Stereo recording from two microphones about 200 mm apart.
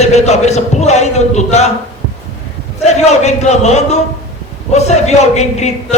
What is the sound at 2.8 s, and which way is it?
A man's voice, 35° left (ahead or behind).